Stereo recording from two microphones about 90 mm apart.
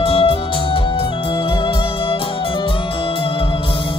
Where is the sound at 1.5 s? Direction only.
70° left (ahead or behind).